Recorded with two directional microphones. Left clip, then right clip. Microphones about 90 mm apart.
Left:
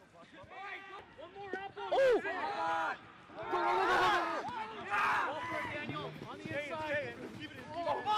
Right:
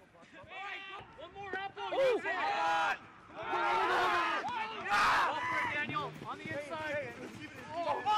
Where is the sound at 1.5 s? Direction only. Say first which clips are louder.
Right 3 dB; 40° right (ahead or behind).